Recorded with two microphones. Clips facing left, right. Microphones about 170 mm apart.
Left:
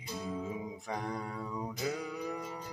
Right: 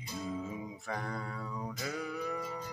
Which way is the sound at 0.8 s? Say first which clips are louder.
Left 1 dB; 15° left (ahead or behind).